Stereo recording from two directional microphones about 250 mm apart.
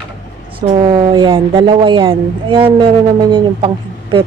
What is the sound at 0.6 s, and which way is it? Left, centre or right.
Speech, centre.